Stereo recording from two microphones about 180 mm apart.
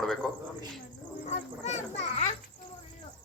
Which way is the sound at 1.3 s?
40° left (ahead or behind).